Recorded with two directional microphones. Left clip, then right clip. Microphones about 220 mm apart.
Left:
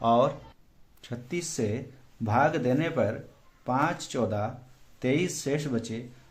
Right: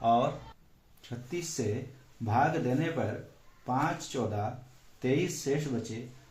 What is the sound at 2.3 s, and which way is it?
Speech, 35° left (ahead or behind).